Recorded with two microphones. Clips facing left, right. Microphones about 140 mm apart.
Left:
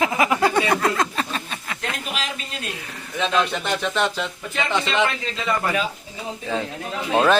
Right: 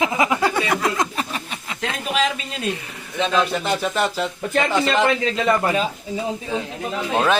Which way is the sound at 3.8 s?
5° right (ahead or behind).